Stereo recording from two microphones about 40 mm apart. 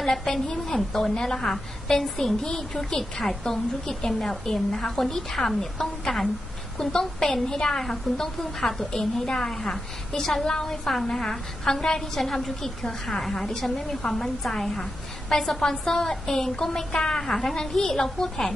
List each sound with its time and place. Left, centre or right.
0.0 s a woman's voice: centre